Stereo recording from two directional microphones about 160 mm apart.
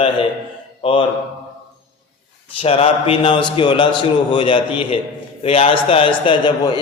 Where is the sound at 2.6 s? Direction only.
40° left (ahead or behind).